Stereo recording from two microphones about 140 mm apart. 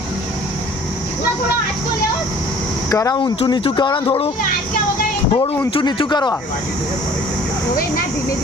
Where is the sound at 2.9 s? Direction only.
25° left (ahead or behind).